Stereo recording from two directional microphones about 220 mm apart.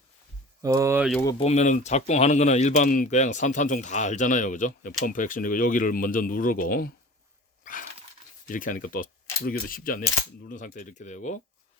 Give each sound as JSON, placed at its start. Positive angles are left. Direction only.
{"t": 0.6, "sound": "speech", "side_deg": -15}
{"t": 1.4, "sound": "speech", "side_deg": 30}
{"t": 7.6, "sound": "a sound", "side_deg": 40}
{"t": 8.4, "sound": "speech", "side_deg": 40}